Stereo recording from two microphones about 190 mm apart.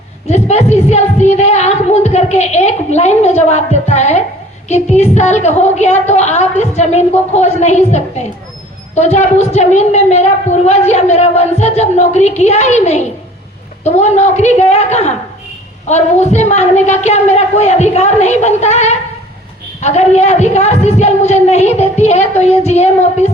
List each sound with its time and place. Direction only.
0.3 s a woman's voice: 35° left (ahead or behind)